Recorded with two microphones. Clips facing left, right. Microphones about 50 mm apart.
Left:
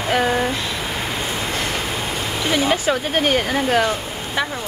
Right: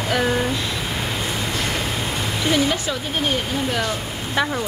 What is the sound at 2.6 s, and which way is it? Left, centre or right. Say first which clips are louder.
Speech: left 3 dB; left.